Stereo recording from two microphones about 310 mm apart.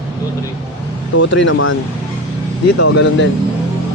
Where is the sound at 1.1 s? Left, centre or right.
Left.